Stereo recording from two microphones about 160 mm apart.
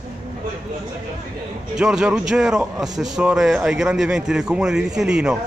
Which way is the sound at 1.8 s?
5° right (ahead or behind).